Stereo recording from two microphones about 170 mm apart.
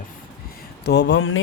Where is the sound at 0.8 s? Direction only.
90° left.